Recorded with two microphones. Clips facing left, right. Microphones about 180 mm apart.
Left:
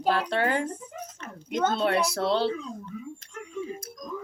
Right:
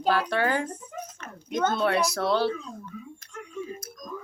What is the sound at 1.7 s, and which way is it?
Speech, 30° left (ahead or behind).